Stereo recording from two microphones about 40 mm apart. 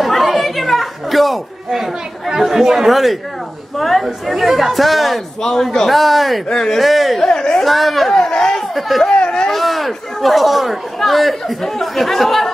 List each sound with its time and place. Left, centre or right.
0.0 s chatter: centre
1.7 s speech: centre
2.9 s speech: centre
5.4 s speech: centre
5.9 s speech: centre
6.5 s speech: centre
6.8 s speech: centre
7.2 s speech: centre
7.6 s speech: centre
8.1 s a sound: left
8.5 s a sound: centre
9.1 s a sound: left
9.5 s speech: centre